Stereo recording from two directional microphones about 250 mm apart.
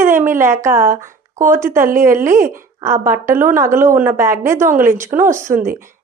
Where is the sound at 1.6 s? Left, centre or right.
Centre.